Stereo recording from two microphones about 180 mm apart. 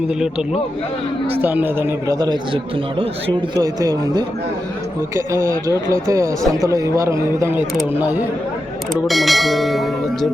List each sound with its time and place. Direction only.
1.4 s speech: 10° right (ahead or behind)